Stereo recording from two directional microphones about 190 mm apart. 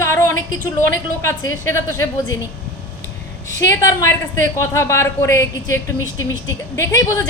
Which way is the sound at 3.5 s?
15° left (ahead or behind).